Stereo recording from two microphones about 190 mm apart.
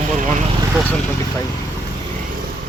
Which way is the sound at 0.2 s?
40° right (ahead or behind).